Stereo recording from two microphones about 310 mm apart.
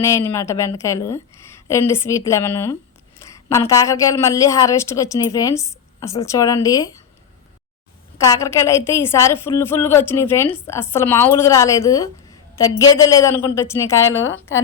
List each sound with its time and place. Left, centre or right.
0.0 s a woman's voice: centre
8.2 s a woman's voice: centre
14.2 s a woman's voice: left